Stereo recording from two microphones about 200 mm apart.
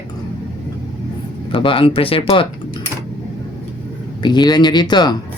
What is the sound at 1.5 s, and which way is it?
Speech, 25° left (ahead or behind).